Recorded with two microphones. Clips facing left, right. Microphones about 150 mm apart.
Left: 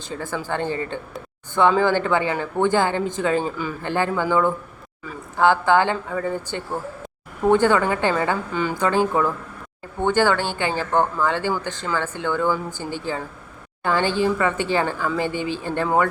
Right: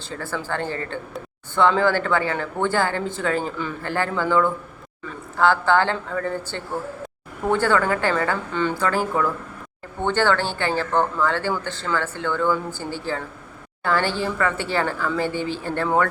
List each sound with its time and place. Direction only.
0.4 s speech: 15° left (ahead or behind)